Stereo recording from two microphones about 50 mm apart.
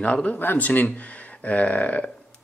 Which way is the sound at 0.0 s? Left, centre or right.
Left.